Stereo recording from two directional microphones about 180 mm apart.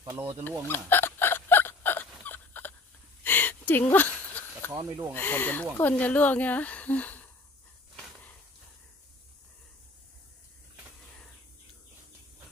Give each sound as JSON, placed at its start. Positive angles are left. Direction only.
{"t": 0.0, "sound": "speech", "side_deg": -15}
{"t": 0.4, "sound": "hiccup", "side_deg": 10}
{"t": 3.3, "sound": "a sound", "side_deg": 10}
{"t": 4.8, "sound": "speech", "side_deg": -15}
{"t": 5.1, "sound": "a woman's voice", "side_deg": 10}